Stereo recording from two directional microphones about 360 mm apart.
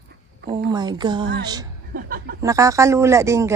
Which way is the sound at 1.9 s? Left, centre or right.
Right.